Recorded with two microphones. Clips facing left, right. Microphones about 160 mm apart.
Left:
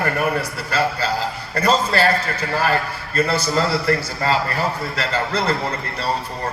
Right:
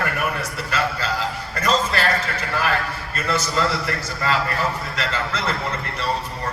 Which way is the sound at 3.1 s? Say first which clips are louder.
Left 4 dB; 35° left (ahead or behind).